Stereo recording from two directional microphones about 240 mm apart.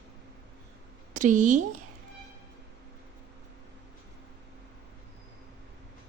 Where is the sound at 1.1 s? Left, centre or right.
Right.